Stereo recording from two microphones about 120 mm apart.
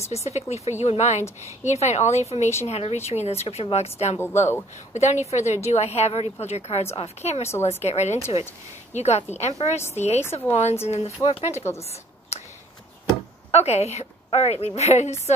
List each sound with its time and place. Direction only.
0.1 s a woman's voice: 65° left (ahead or behind)
4.2 s speech: 20° left (ahead or behind)
4.9 s a woman's voice: 70° left (ahead or behind)
11.8 s a sound: 60° left (ahead or behind)
13.5 s a woman's voice: 65° left (ahead or behind)